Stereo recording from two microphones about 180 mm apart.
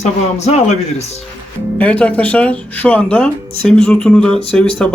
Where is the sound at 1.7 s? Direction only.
10° left (ahead or behind).